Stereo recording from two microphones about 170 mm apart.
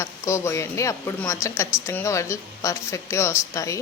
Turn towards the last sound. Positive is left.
turn(degrees=20)  # may be behind; listen again after turning